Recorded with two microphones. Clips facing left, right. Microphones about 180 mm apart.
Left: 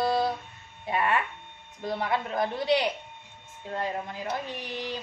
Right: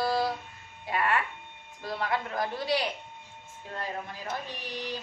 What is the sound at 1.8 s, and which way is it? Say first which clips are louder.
A woman's voice: left 3 dB; 20° left (ahead or behind).